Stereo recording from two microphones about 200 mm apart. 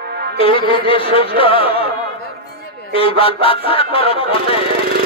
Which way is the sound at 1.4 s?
30° left (ahead or behind).